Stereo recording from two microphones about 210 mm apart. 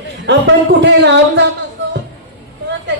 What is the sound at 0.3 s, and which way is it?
A man's voice, 55° right (ahead or behind).